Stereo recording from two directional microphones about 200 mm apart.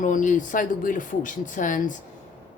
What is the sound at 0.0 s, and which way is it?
A woman's voice, 40° left (ahead or behind).